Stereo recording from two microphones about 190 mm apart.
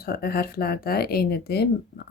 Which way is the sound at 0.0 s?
55° left (ahead or behind).